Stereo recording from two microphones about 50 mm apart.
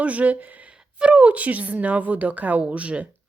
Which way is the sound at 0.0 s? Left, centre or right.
Right.